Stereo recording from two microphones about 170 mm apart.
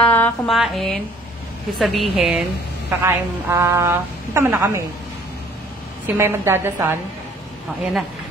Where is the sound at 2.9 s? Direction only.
15° right (ahead or behind).